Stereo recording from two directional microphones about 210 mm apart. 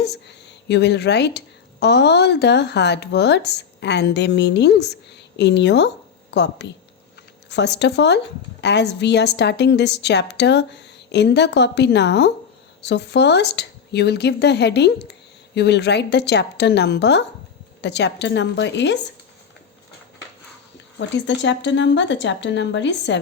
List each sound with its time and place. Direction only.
0.0 s a woman's voice: 55° left (ahead or behind)
21.2 s a woman's voice: 60° left (ahead or behind)